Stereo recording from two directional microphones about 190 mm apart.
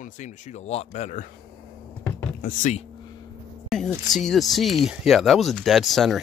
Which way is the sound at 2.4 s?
40° left (ahead or behind).